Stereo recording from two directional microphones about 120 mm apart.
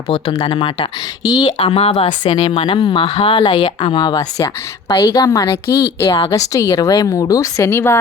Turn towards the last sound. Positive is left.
turn(degrees=20)  # may be behind; listen again after turning